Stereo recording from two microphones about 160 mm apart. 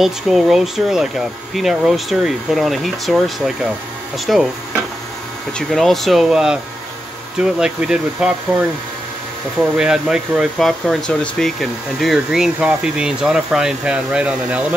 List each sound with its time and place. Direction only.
0.0 s speech: centre (ahead or behind)
5.6 s speech: centre (ahead or behind)
9.8 s speech: 5° right (ahead or behind)